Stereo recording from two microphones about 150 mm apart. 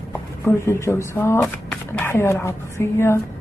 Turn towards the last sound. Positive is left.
turn(degrees=15)  # may be behind; listen again after turning